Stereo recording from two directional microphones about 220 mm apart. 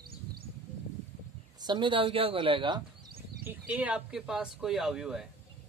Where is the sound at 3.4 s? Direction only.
5° right (ahead or behind).